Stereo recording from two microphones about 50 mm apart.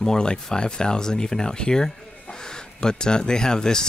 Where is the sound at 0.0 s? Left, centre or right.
Centre.